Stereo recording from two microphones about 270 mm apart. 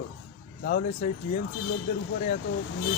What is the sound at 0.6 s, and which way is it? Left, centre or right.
Speech, left.